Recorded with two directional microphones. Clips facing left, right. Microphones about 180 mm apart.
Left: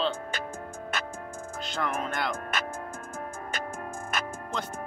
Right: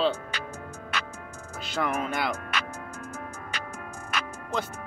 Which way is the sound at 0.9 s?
50° left (ahead or behind).